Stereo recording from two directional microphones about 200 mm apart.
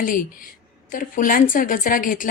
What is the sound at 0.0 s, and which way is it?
A woman's voice, 45° left (ahead or behind).